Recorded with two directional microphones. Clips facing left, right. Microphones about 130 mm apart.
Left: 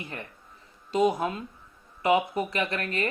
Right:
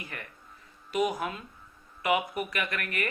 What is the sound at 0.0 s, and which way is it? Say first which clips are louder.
Music: left 4 dB; 25° left (ahead or behind).